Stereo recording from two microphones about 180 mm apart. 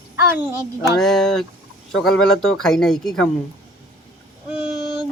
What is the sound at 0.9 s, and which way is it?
Speech, centre (ahead or behind).